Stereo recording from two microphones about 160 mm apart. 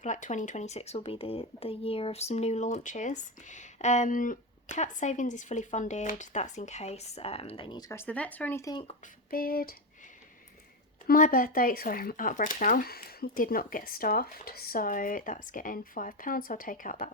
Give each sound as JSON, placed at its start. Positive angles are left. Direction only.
{"t": 0.0, "sound": "speech", "side_deg": 50}
{"t": 8.7, "sound": "speech", "side_deg": 35}
{"t": 9.3, "sound": "a sound", "side_deg": 65}
{"t": 11.0, "sound": "speech", "side_deg": 60}